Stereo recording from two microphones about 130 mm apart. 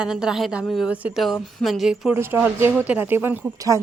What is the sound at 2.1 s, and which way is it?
Speech, 15° right (ahead or behind).